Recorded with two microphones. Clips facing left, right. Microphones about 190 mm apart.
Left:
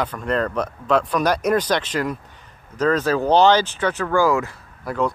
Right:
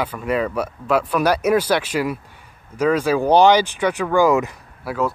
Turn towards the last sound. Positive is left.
turn(degrees=-5)  # may be behind; listen again after turning